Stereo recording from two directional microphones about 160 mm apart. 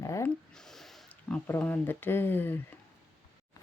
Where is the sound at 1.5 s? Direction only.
10° left (ahead or behind).